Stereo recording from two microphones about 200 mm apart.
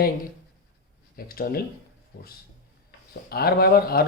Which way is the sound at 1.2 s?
45° left (ahead or behind).